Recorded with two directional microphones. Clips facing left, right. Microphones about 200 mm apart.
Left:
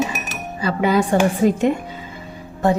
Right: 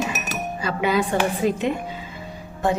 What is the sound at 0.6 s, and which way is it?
A woman's voice, 40° left (ahead or behind).